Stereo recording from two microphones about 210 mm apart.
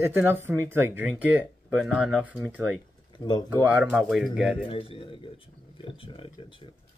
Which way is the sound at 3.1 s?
20° left (ahead or behind).